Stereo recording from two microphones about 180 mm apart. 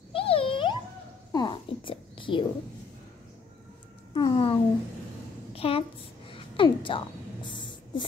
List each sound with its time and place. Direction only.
0.1 s music: 30° left (ahead or behind)
1.3 s whispering: 25° left (ahead or behind)
4.1 s a sound: 30° left (ahead or behind)